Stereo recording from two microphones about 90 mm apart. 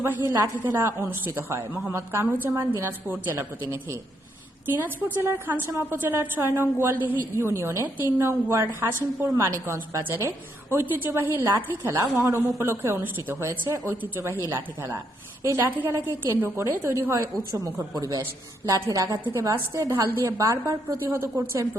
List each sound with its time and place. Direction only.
0.0 s a woman's voice: 25° right (ahead or behind)
4.6 s a woman's voice: 20° right (ahead or behind)
17.7 s a woman's voice: 40° right (ahead or behind)